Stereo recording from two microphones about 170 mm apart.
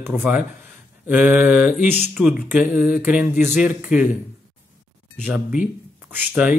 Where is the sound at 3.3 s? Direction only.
45° left (ahead or behind).